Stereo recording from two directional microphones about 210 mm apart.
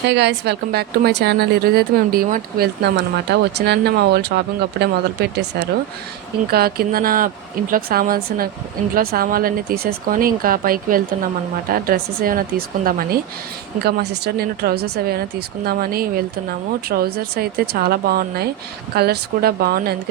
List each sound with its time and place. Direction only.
0.1 s speech: 55° right (ahead or behind)
14.3 s speech: 50° right (ahead or behind)